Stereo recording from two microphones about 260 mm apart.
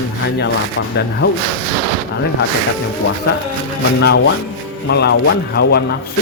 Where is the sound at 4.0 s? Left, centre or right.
Left.